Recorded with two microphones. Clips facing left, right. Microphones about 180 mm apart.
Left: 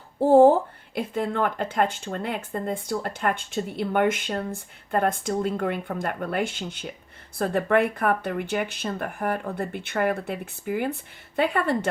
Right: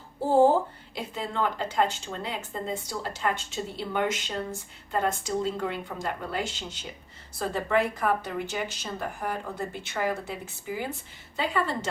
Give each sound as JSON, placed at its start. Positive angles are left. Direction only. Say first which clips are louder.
{"t": 0.3, "sound": "speech", "louder": "left 5 dB", "side_deg": 55}